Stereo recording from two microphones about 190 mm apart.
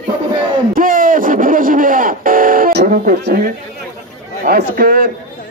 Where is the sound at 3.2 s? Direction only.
55° right (ahead or behind).